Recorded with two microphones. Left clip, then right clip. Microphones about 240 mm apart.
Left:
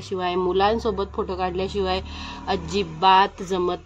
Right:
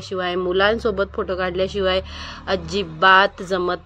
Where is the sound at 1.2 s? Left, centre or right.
Centre.